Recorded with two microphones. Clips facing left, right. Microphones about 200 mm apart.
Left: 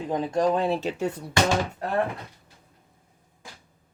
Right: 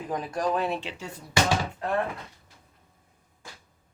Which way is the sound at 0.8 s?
45° left (ahead or behind).